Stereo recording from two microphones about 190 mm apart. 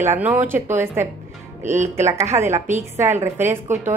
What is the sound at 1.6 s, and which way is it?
Speech, 40° right (ahead or behind).